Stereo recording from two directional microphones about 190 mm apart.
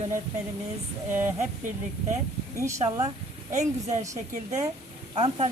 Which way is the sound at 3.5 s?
40° right (ahead or behind).